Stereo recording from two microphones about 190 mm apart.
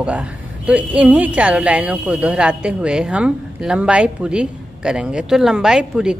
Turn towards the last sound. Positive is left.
turn(degrees=-5)  # may be behind; listen again after turning